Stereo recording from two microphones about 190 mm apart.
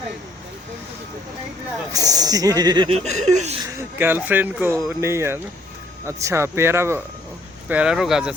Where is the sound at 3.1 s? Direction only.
35° right (ahead or behind).